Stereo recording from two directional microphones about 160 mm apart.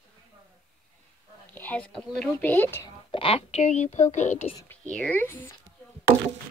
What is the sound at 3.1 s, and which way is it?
A woman's voice, 35° left (ahead or behind).